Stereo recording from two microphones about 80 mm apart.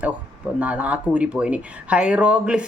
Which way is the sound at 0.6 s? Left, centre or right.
Centre.